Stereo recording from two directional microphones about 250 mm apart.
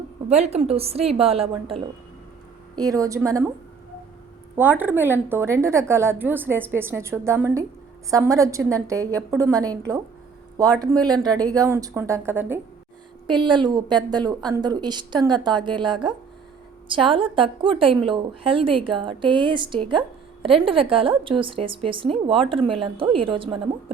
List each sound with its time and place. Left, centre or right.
0.3 s a woman's voice: right
4.5 s a woman's voice: centre